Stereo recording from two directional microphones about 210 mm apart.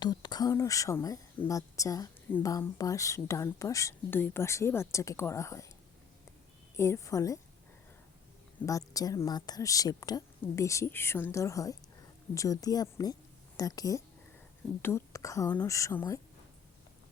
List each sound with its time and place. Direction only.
0.0 s a woman's voice: 20° left (ahead or behind)
6.7 s a woman's voice: 15° left (ahead or behind)
8.6 s a woman's voice: 15° left (ahead or behind)